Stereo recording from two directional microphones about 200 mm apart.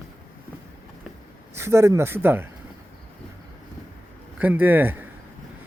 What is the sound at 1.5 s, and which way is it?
Speech, 15° right (ahead or behind).